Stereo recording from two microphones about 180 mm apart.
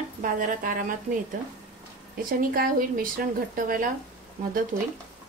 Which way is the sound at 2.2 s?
55° right (ahead or behind).